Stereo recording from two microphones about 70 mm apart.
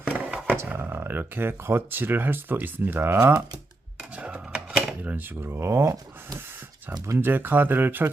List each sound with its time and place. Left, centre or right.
0.0 s a sound: centre
0.7 s speech: right
4.1 s a sound: centre
5.0 s speech: right
5.5 s speech: right
7.2 s speech: right